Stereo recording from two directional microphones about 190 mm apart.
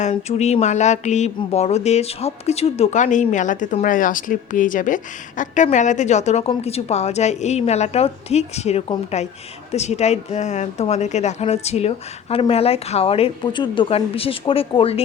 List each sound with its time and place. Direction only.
0.0 s speech: 35° left (ahead or behind)